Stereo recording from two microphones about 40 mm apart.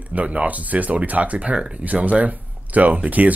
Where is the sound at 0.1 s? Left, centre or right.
Right.